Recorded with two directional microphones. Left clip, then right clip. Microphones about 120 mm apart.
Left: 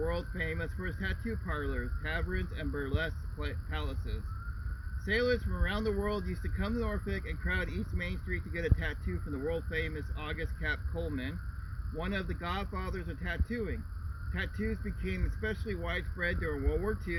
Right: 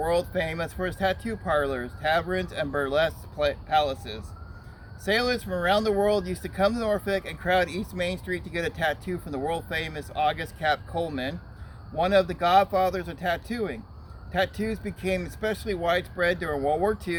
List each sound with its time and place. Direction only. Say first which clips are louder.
0.0 s speech: right 10 dB; 40° right (ahead or behind)